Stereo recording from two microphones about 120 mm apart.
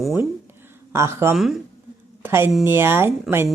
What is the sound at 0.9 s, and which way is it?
A woman's voice, 20° right (ahead or behind).